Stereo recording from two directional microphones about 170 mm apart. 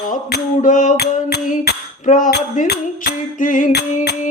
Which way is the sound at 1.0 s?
70° left (ahead or behind).